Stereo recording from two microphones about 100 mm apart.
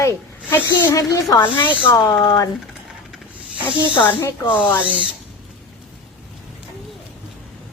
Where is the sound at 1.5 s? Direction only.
50° left (ahead or behind).